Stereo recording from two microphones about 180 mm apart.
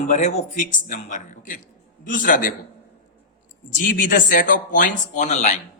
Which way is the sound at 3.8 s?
50° left (ahead or behind).